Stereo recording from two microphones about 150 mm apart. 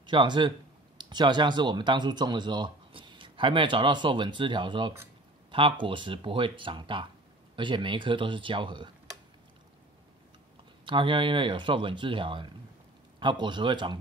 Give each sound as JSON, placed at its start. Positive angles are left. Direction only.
{"t": 0.0, "sound": "speech", "side_deg": -30}
{"t": 10.9, "sound": "speech", "side_deg": -35}